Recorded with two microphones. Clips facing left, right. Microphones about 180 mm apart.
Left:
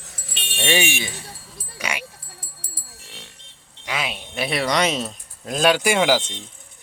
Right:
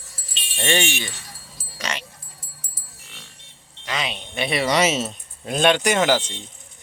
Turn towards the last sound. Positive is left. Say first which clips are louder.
# even
turn(degrees=10)  # may be behind; listen again after turning